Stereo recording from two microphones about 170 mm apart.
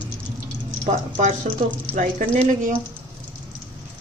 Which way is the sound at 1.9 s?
45° right (ahead or behind).